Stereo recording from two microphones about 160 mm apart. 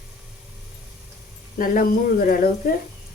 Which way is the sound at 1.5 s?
60° left (ahead or behind).